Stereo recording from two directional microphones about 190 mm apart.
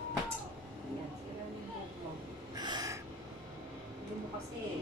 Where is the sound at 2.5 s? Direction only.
20° right (ahead or behind).